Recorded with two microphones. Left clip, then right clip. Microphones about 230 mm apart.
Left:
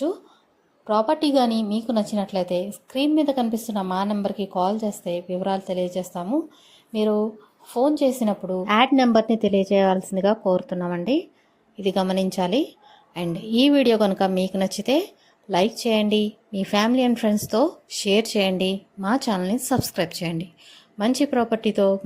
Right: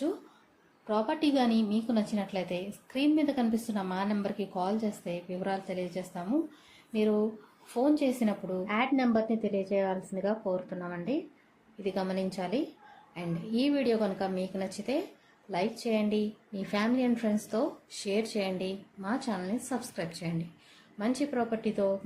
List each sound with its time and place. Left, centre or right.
0.9 s a woman's voice: left